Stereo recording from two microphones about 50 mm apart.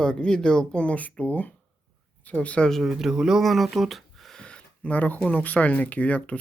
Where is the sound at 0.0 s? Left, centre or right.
Centre.